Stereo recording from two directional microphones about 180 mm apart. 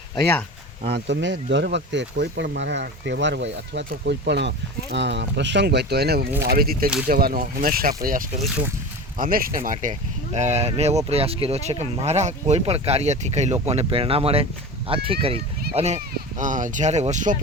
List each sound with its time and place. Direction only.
0.9 s speech: 70° right (ahead or behind); by 17.3 s 40° right (ahead or behind)